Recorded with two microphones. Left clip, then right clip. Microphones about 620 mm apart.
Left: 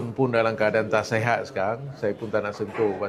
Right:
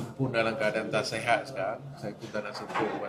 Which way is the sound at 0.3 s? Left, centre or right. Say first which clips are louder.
Left 5 dB; left.